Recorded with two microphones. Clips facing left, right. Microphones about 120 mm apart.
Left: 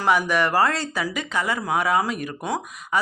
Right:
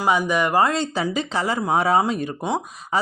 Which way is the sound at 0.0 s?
20° right (ahead or behind).